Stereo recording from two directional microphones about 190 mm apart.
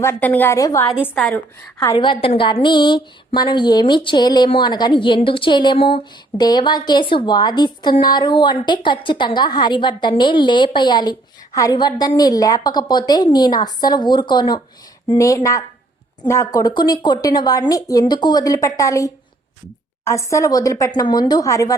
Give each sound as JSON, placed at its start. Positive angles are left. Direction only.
{"t": 0.0, "sound": "speech", "side_deg": 10}
{"t": 1.8, "sound": "a woman's voice", "side_deg": 20}